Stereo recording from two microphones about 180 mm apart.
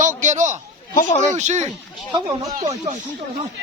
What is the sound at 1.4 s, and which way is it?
Speech, 40° right (ahead or behind).